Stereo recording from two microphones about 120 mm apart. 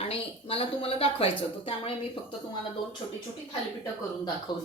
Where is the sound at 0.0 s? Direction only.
55° left (ahead or behind).